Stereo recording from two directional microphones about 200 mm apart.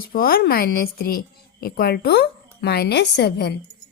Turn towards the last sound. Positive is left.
turn(degrees=55)  # may be behind; listen again after turning